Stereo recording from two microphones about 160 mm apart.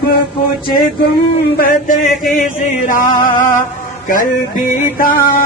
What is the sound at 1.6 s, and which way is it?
Music, 60° left (ahead or behind).